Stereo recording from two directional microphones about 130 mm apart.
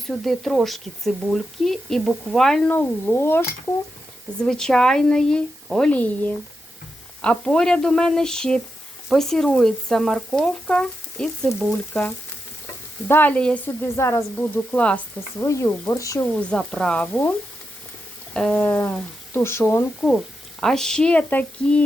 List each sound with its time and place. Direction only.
0.1 s speech: centre (ahead or behind)
2.7 s speech: 15° left (ahead or behind)
4.4 s speech: 5° left (ahead or behind)
13.1 s speech: 15° left (ahead or behind)
15.4 s speech: 20° left (ahead or behind)
16.3 s speech: 5° left (ahead or behind)
18.3 s speech: 5° left (ahead or behind)
20.0 s speech: 5° left (ahead or behind)